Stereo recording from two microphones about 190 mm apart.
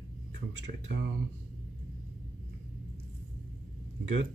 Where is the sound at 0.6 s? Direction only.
65° right (ahead or behind).